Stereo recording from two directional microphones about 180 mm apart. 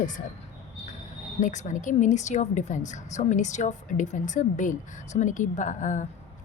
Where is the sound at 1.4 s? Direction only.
45° left (ahead or behind).